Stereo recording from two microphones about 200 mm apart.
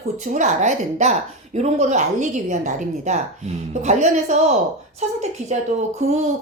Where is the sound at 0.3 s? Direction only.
40° right (ahead or behind).